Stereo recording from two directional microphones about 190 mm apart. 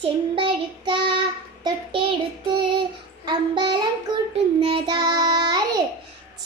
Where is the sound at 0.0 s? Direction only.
25° right (ahead or behind).